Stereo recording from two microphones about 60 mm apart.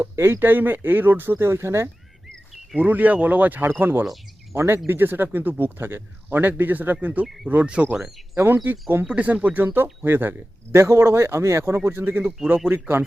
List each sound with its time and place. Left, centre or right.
0.0 s a man's voice: right
2.7 s a man's voice: right
8.6 s a man's voice: right
9.0 s a man's voice: right
10.8 s a man's voice: right